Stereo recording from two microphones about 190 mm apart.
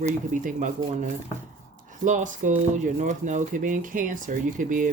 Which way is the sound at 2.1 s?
40° right (ahead or behind).